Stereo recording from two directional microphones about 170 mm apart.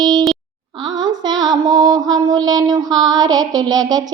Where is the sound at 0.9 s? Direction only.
25° right (ahead or behind).